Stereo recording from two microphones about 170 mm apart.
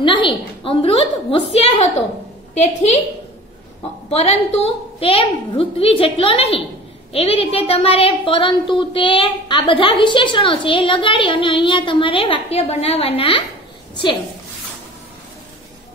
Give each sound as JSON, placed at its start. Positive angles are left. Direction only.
{"t": 0.0, "sound": "a woman's voice", "side_deg": 30}
{"t": 4.1, "sound": "a woman's voice", "side_deg": 40}